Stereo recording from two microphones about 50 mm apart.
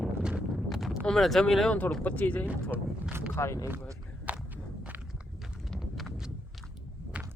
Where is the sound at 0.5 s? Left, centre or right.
Centre.